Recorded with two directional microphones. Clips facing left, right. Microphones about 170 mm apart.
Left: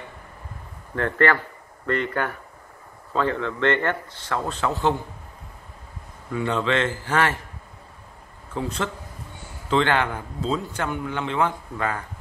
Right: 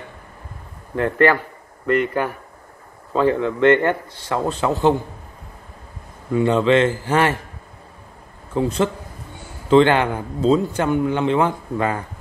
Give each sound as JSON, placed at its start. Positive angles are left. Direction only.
{"t": 0.9, "sound": "a man's voice", "side_deg": -10}
{"t": 6.3, "sound": "a man's voice", "side_deg": -15}
{"t": 8.5, "sound": "a man's voice", "side_deg": -15}